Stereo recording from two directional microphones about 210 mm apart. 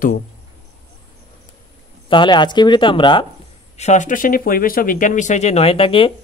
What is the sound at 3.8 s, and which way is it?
Speech, 35° left (ahead or behind).